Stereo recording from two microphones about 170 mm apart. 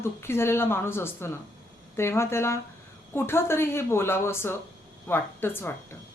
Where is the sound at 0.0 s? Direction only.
15° left (ahead or behind).